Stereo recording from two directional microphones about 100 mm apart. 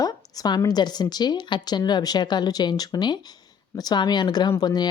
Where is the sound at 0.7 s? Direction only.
45° left (ahead or behind).